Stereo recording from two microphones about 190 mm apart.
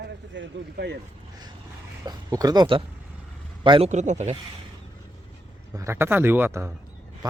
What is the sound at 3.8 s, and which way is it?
Speech, 40° right (ahead or behind).